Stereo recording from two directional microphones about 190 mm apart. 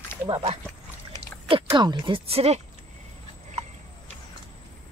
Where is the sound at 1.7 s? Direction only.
20° right (ahead or behind).